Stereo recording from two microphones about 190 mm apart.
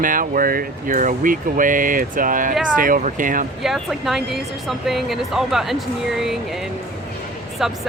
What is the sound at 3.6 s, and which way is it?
Speech, centre (ahead or behind).